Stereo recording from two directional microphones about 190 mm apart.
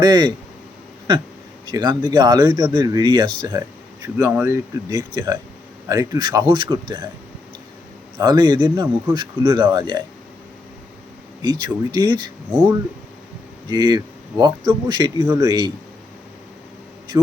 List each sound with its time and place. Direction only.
0.0 s speech: 20° right (ahead or behind)
1.6 s speech: 20° right (ahead or behind)
8.2 s speech: 20° right (ahead or behind)
11.4 s speech: 20° right (ahead or behind)
13.7 s speech: 20° right (ahead or behind)